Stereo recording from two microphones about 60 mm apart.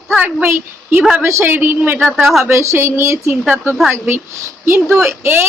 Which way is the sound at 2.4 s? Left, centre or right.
Right.